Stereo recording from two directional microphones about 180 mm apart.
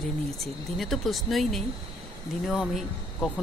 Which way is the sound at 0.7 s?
Centre (ahead or behind).